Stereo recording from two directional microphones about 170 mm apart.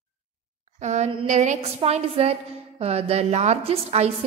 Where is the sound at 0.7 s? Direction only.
40° right (ahead or behind).